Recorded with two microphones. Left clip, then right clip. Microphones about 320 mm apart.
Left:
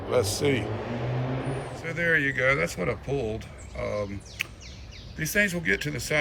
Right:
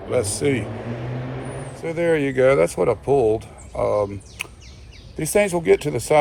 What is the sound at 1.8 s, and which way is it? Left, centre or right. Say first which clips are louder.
Speech: right 4 dB; centre.